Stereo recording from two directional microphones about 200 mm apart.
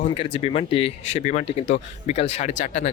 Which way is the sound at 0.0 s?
25° left (ahead or behind).